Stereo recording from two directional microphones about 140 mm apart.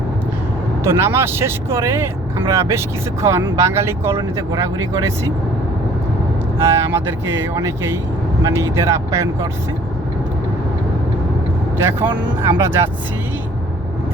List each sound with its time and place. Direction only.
0.9 s speech: 20° right (ahead or behind)
6.6 s speech: 20° right (ahead or behind)
11.8 s speech: 15° right (ahead or behind)